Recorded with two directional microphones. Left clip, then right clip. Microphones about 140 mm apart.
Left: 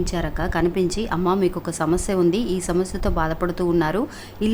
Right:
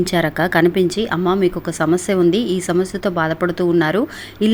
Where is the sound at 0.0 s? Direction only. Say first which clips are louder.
Right 8 dB; 30° right (ahead or behind).